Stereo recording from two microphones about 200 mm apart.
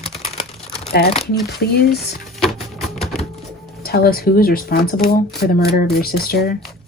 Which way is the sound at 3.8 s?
50° left (ahead or behind).